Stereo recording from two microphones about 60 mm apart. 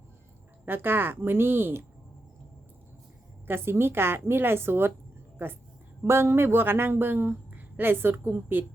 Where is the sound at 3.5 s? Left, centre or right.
Right.